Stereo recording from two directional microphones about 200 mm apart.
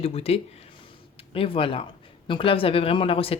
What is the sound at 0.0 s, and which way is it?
Speech, 30° left (ahead or behind).